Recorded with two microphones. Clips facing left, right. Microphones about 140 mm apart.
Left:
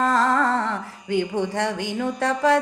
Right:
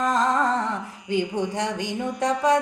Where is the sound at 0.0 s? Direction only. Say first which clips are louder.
Left 2 dB; 20° right (ahead or behind).